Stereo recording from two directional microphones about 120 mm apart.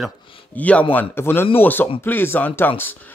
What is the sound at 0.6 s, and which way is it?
Speech, 10° left (ahead or behind).